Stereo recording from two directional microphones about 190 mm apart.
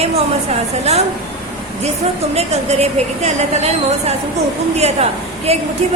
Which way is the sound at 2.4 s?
35° right (ahead or behind).